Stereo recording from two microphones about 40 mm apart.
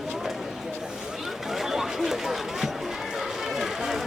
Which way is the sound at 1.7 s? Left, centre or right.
Centre.